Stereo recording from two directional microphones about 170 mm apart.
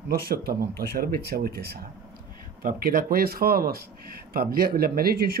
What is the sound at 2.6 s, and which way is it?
Speech, 60° right (ahead or behind).